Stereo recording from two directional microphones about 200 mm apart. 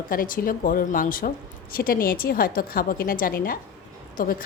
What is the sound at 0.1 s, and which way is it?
A woman's voice, 45° left (ahead or behind).